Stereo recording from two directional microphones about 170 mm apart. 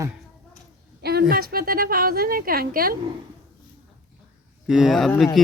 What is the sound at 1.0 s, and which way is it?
A woman's voice, 65° right (ahead or behind).